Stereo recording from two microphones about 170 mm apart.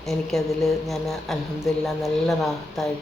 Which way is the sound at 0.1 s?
Centre (ahead or behind).